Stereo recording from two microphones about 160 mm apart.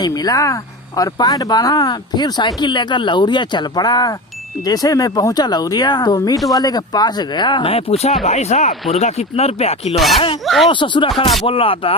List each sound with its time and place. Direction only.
0.0 s speech: 25° left (ahead or behind); by 9.9 s 40° left (ahead or behind)
9.9 s speech: centre (ahead or behind)
10.2 s speech: 30° left (ahead or behind)
10.4 s speech: centre (ahead or behind)
10.7 s speech: 30° left (ahead or behind)